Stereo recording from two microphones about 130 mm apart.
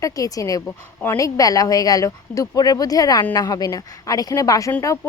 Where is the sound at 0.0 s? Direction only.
25° left (ahead or behind).